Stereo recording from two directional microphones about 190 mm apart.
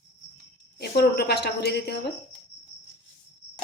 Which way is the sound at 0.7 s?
55° left (ahead or behind).